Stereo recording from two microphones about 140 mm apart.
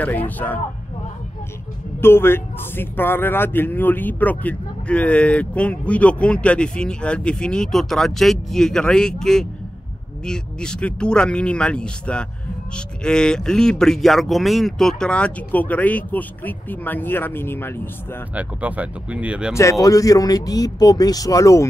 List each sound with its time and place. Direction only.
0.0 s a man's voice: 10° left (ahead or behind)
2.0 s a man's voice: 15° left (ahead or behind)
18.3 s speech: 10° right (ahead or behind)
19.5 s speech: 20° left (ahead or behind)